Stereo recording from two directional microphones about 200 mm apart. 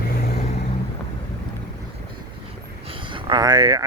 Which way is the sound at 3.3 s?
20° right (ahead or behind).